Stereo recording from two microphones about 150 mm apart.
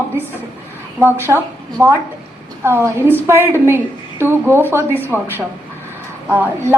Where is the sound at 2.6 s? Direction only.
15° right (ahead or behind).